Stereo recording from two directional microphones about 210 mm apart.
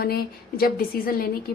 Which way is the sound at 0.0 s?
45° left (ahead or behind).